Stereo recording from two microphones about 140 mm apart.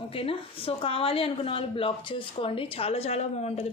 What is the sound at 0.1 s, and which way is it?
A woman's voice, 40° left (ahead or behind).